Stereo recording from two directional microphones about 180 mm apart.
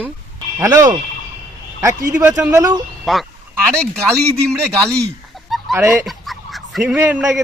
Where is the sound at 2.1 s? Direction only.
10° right (ahead or behind).